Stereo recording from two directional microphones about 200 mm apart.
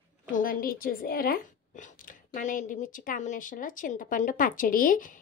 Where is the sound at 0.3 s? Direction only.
45° left (ahead or behind).